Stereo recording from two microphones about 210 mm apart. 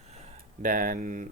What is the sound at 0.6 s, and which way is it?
Speech, 40° right (ahead or behind).